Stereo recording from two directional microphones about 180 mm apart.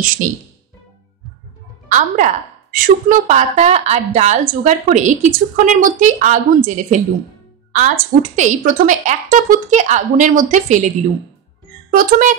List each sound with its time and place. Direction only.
0.2 s a woman's voice: 45° right (ahead or behind)
1.9 s a woman's voice: 45° right (ahead or behind)
11.9 s a woman's voice: 50° right (ahead or behind)